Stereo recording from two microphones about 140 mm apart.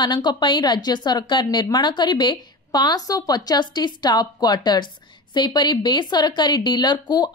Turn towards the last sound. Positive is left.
turn(degrees=30)  # may be behind; listen again after turning